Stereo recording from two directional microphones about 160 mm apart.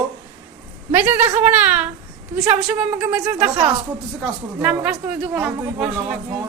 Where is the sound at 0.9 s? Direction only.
15° right (ahead or behind).